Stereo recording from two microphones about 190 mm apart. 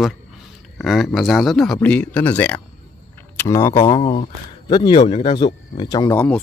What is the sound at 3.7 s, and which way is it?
Speech, 30° left (ahead or behind).